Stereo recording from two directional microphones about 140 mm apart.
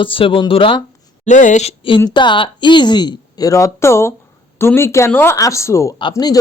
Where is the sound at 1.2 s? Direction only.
60° left (ahead or behind).